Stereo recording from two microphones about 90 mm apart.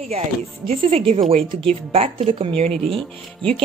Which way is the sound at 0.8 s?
85° right.